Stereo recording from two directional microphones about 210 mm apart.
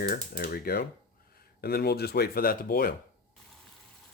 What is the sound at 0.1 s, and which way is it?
Speech, 45° left (ahead or behind).